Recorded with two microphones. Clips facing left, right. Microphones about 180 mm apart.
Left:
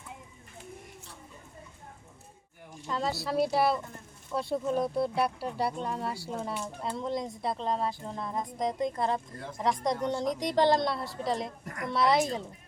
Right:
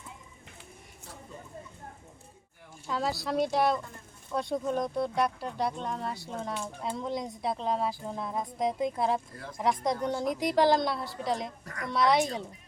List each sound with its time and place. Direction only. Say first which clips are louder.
2.8 s speech: even; centre (ahead or behind)
11.6 s a child's voice: left 2 dB; 25° left (ahead or behind)
11.9 s speech: even; centre (ahead or behind)